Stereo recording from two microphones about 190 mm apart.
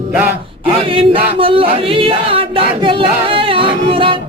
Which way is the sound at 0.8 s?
30° right (ahead or behind).